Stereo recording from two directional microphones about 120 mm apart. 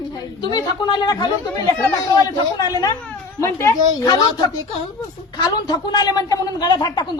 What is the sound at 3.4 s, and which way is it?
A woman's voice, 25° left (ahead or behind).